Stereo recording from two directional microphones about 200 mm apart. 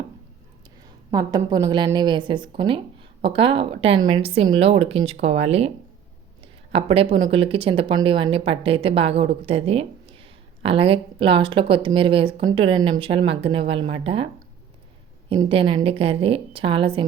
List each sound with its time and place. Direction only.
1.1 s a woman's voice: 20° right (ahead or behind)
15.3 s a woman's voice: 25° right (ahead or behind)